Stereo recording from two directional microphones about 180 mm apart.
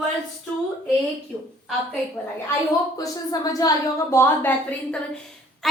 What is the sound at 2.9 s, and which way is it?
A woman's voice, 20° left (ahead or behind).